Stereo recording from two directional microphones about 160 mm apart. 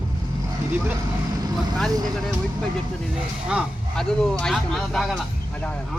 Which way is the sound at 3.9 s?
5° left (ahead or behind).